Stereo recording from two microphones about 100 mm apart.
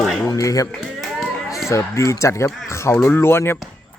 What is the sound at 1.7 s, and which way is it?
Speech, 30° left (ahead or behind).